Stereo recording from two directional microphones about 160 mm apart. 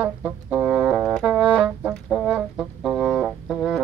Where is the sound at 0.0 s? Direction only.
10° right (ahead or behind).